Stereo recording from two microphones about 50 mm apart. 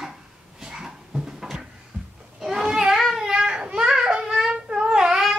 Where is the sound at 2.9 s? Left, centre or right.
Centre.